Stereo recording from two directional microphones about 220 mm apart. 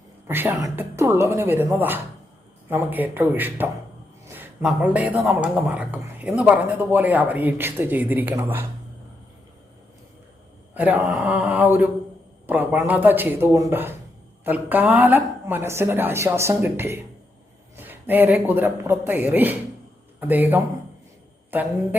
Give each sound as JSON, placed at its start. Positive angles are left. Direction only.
{"t": 0.3, "sound": "speech", "side_deg": -10}
{"t": 10.8, "sound": "speech", "side_deg": -5}